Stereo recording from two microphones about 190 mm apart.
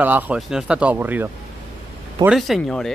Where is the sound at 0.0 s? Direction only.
10° right (ahead or behind).